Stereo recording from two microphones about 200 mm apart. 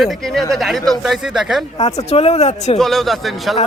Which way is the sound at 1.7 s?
30° left (ahead or behind).